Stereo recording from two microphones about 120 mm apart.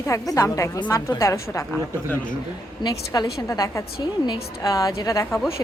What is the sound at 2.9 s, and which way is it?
A woman's voice, 30° left (ahead or behind).